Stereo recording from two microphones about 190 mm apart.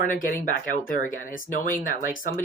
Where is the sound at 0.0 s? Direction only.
45° left (ahead or behind).